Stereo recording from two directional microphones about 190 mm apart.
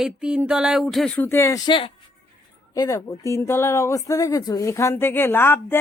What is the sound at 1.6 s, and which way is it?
Speech, 25° left (ahead or behind).